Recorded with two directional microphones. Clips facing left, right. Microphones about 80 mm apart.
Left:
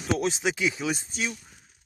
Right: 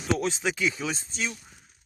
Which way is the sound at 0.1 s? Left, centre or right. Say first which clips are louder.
Left 1 dB; centre.